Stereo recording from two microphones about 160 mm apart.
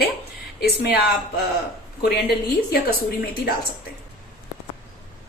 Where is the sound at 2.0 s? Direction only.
75° left (ahead or behind).